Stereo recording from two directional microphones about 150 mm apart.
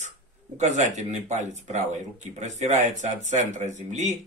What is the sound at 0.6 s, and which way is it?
Speech, 50° right (ahead or behind).